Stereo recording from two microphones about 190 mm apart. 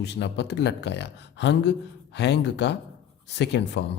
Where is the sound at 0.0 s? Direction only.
65° left (ahead or behind).